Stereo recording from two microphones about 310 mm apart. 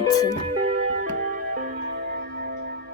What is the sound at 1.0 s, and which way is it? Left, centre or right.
Music, right.